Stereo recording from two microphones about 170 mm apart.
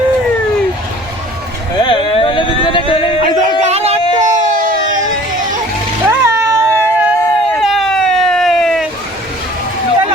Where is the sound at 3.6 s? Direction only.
40° right (ahead or behind).